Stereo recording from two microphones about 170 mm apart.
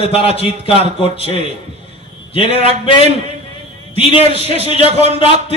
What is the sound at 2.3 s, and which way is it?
A man's voice, 35° left (ahead or behind).